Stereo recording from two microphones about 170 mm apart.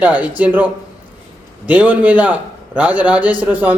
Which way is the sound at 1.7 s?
10° right (ahead or behind).